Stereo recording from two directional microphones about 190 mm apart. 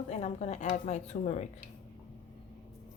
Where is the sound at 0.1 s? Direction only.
35° left (ahead or behind).